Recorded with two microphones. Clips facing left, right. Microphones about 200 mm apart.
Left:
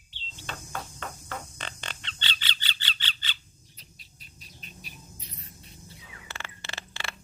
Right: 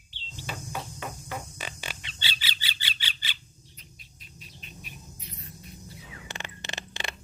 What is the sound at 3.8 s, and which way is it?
Rodents, 35° left (ahead or behind).